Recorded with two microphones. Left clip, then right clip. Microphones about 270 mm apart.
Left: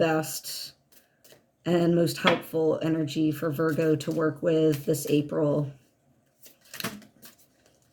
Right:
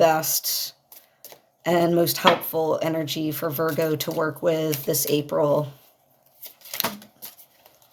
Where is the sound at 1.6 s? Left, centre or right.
Right.